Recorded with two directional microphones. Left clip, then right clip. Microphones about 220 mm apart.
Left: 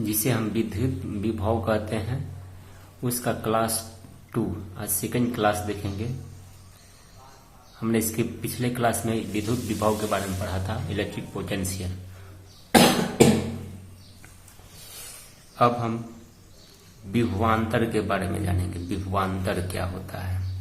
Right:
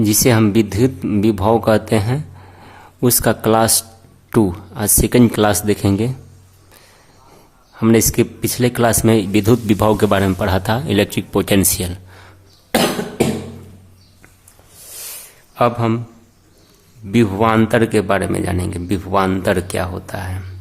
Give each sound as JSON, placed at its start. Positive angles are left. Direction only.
{"t": 0.0, "sound": "speech", "side_deg": -45}
{"t": 7.8, "sound": "speech", "side_deg": -45}
{"t": 12.7, "sound": "cough", "side_deg": -45}
{"t": 15.5, "sound": "speech", "side_deg": -45}
{"t": 17.1, "sound": "speech", "side_deg": -45}